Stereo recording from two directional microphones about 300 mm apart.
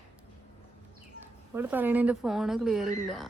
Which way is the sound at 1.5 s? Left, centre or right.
Centre.